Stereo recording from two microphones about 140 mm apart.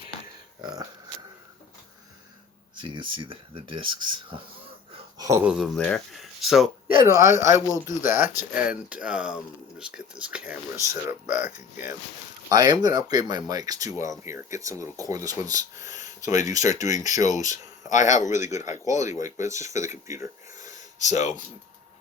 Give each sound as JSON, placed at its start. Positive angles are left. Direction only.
{"t": 2.7, "sound": "speech", "side_deg": -35}
{"t": 5.1, "sound": "a sound", "side_deg": -25}
{"t": 5.4, "sound": "speech", "side_deg": -5}
{"t": 5.7, "sound": "speech", "side_deg": 5}
{"t": 6.8, "sound": "speech", "side_deg": -15}
{"t": 11.3, "sound": "speech", "side_deg": 65}
{"t": 12.5, "sound": "speech", "side_deg": -30}
{"t": 16.0, "sound": "a sound", "side_deg": 60}
{"t": 16.6, "sound": "speech", "side_deg": 60}
{"t": 16.8, "sound": "speech", "side_deg": -25}
{"t": 17.2, "sound": "speech", "side_deg": 60}
{"t": 18.7, "sound": "speech", "side_deg": -20}
{"t": 19.6, "sound": "speech", "side_deg": 60}
{"t": 20.7, "sound": "a sound", "side_deg": 55}